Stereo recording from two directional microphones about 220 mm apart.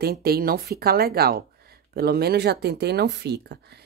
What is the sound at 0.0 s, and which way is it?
A woman's voice, 45° right (ahead or behind).